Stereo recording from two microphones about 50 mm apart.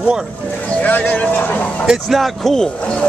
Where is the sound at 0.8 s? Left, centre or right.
Left.